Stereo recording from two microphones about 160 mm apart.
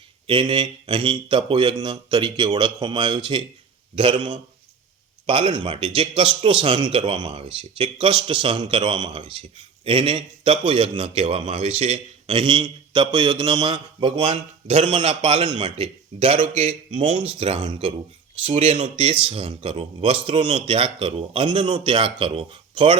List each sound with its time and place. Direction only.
0.3 s speech: 30° right (ahead or behind)